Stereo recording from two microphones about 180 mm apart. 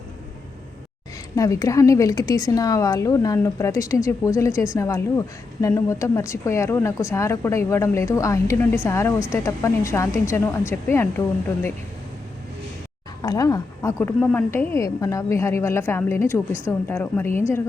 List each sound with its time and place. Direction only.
1.4 s a woman's voice: 20° left (ahead or behind)
13.2 s a woman's voice: 20° left (ahead or behind)
16.5 s speech: 10° right (ahead or behind)
16.9 s a woman's voice: 10° left (ahead or behind)